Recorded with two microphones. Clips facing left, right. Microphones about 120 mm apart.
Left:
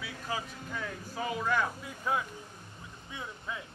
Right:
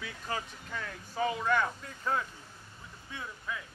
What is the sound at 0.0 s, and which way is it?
Speech, 5° left (ahead or behind).